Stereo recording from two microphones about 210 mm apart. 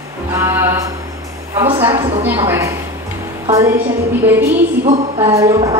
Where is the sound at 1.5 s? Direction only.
20° right (ahead or behind).